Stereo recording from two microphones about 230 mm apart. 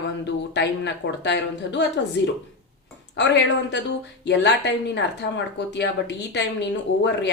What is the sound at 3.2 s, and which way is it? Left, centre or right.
A woman's voice, left.